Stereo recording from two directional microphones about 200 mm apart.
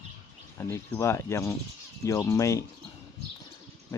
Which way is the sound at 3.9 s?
15° left (ahead or behind).